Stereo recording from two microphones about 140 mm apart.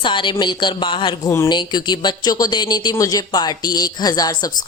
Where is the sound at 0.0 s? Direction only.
35° left (ahead or behind).